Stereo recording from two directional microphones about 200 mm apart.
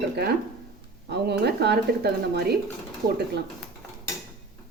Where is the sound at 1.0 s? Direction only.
55° right (ahead or behind).